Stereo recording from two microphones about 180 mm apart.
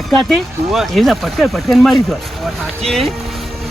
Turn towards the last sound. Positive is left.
turn(degrees=5)  # may be behind; listen again after turning